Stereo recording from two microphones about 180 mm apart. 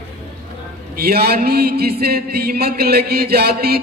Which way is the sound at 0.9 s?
60° right (ahead or behind).